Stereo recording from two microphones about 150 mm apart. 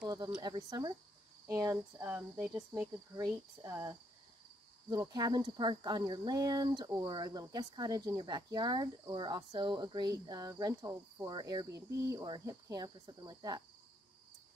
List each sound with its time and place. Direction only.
0.4 s speech: 25° right (ahead or behind)